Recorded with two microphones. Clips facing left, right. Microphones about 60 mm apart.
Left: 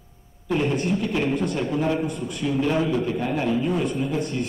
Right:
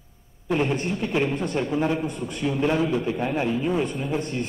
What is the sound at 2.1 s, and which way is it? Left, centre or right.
Speech, right.